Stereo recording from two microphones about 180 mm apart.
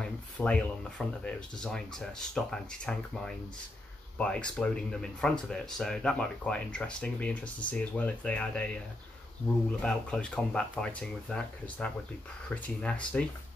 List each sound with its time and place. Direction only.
0.0 s speech: 5° left (ahead or behind)
9.8 s speech: 5° left (ahead or behind)